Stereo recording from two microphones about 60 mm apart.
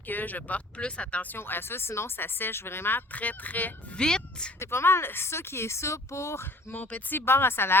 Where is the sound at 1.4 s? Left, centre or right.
Left.